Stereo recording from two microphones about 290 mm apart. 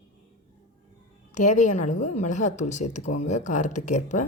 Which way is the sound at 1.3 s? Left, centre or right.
Left.